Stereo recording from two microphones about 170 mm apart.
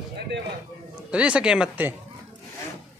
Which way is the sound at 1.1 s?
5° right (ahead or behind).